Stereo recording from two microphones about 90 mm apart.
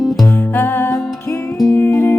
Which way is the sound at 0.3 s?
25° left (ahead or behind).